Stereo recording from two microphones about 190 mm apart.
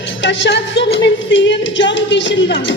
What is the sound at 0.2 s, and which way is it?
Music, 75° left (ahead or behind).